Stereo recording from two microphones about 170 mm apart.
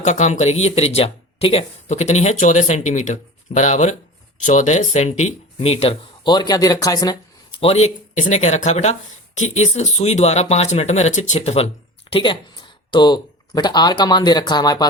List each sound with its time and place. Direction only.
0.0 s speech: 45° left (ahead or behind); by 7.6 s 20° left (ahead or behind)
7.6 s speech: 40° left (ahead or behind); by 14.8 s 25° left (ahead or behind)